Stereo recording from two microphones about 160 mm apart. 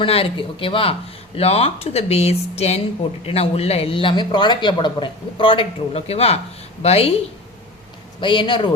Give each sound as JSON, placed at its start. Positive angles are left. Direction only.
{"t": 0.0, "sound": "speech", "side_deg": 35}
{"t": 8.2, "sound": "speech", "side_deg": 30}